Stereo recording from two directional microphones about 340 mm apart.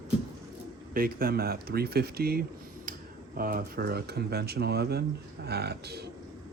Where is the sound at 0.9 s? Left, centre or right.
Right.